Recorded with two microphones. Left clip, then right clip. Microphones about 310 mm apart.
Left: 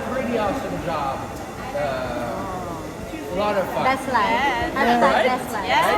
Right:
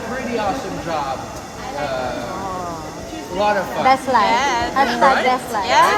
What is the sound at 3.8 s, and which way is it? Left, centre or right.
Speech, right.